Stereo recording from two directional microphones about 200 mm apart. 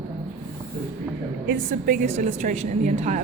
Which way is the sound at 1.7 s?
40° right (ahead or behind).